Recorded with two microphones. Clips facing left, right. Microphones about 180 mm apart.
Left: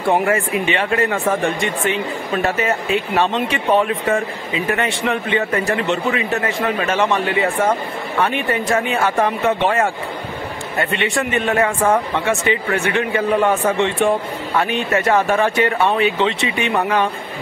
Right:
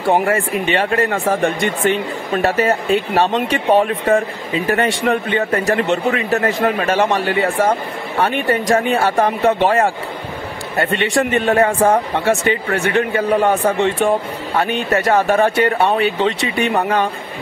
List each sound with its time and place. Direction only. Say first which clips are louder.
0.0 s speech: right 1 dB; 35° right (ahead or behind)